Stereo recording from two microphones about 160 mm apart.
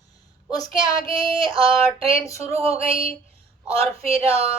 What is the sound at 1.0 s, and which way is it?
Female singing, 35° right (ahead or behind).